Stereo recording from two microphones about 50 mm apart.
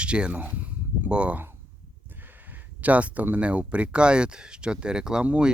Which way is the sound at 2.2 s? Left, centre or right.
Right.